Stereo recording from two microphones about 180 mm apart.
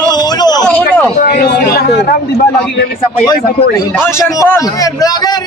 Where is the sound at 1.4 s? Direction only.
60° left (ahead or behind).